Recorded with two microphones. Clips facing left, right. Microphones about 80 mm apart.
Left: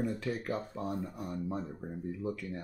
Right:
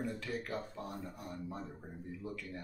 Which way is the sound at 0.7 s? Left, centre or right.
Left.